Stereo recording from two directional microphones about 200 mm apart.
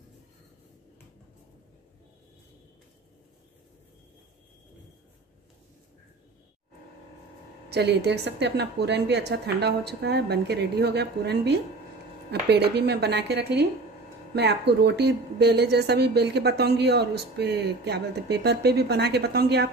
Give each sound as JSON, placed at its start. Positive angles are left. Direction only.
{"t": 7.7, "sound": "speech", "side_deg": -55}